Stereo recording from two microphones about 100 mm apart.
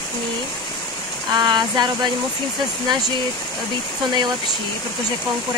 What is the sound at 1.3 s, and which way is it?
Speech, 45° right (ahead or behind).